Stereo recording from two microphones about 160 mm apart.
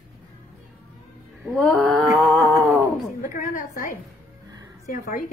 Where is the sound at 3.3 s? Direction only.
60° left (ahead or behind).